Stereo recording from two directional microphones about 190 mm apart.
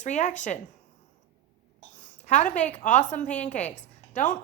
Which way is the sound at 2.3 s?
40° left (ahead or behind).